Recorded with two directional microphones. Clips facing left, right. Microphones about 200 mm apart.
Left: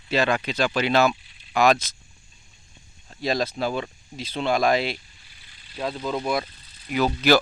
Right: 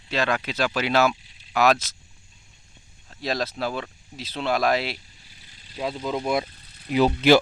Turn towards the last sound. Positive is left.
turn(degrees=-30)  # may be behind; listen again after turning